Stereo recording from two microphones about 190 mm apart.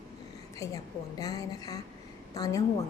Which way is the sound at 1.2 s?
20° left (ahead or behind).